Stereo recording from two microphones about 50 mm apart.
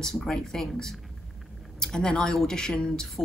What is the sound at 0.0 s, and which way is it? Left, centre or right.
A woman's voice, centre.